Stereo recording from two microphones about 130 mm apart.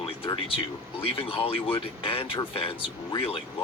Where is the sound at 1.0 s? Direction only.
45° left (ahead or behind).